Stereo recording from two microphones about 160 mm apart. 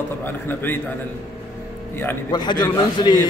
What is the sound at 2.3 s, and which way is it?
Speech, 25° left (ahead or behind).